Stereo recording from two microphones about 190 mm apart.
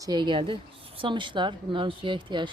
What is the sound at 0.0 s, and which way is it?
Speech, 20° right (ahead or behind).